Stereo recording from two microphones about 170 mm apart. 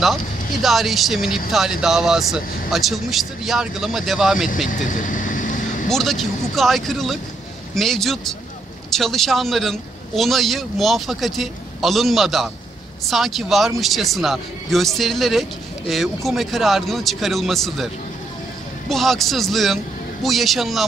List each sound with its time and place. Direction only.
0.0 s a man's voice: centre (ahead or behind)
4.6 s vehicle: 50° left (ahead or behind)
5.9 s a man's voice: centre (ahead or behind)
18.9 s a man's voice: centre (ahead or behind)